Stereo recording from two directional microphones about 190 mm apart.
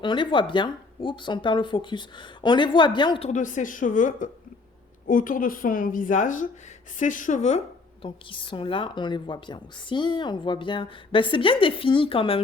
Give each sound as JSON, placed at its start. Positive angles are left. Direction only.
{"t": 0.0, "sound": "a woman's voice", "side_deg": 25}
{"t": 3.2, "sound": "a woman's voice", "side_deg": 40}
{"t": 8.0, "sound": "a woman's voice", "side_deg": 25}